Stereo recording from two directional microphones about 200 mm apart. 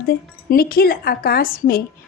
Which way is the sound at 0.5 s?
50° left (ahead or behind).